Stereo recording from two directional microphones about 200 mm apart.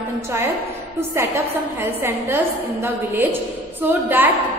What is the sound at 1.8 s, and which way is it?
A woman's voice, 10° right (ahead or behind).